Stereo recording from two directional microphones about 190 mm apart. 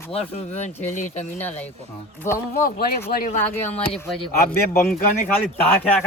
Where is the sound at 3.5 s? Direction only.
35° left (ahead or behind).